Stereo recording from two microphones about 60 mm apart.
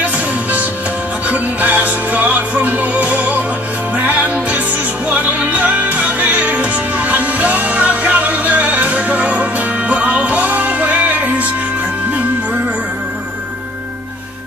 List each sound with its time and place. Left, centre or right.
0.0 s music: right